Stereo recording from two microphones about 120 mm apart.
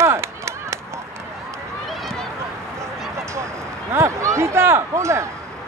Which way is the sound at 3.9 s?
25° right (ahead or behind).